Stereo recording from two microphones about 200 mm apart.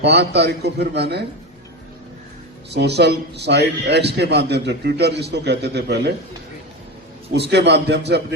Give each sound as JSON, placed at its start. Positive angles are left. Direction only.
{"t": 0.0, "sound": "a man's voice", "side_deg": -55}
{"t": 2.6, "sound": "a man's voice", "side_deg": -55}
{"t": 7.3, "sound": "a man's voice", "side_deg": -55}